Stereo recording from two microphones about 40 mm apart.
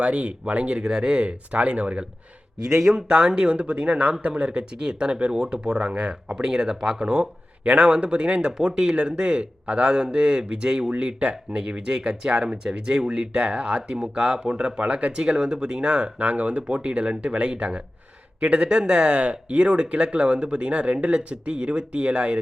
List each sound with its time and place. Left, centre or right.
0.0 s speech: right
0.8 s speech: centre; by 2.0 s right
2.7 s speech: centre
3.1 s a man's voice: right
4.8 s a man's voice: right